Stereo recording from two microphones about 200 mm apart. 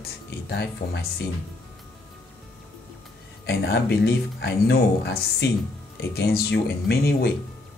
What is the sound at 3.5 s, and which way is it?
Speech, 55° left (ahead or behind).